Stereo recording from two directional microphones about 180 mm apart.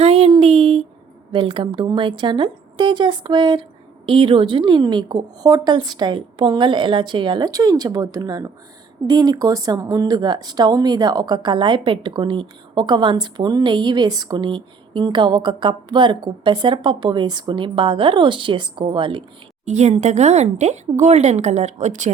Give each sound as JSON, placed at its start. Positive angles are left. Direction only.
{"t": 0.0, "sound": "a sound", "side_deg": -35}
{"t": 1.3, "sound": "a woman's voice", "side_deg": -30}
{"t": 19.6, "sound": "speech", "side_deg": -40}